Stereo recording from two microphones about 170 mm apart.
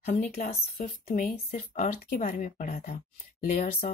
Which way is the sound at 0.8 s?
55° left (ahead or behind).